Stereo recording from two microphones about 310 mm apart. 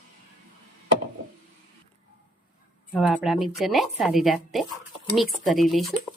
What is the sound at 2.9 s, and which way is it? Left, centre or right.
Speech, centre.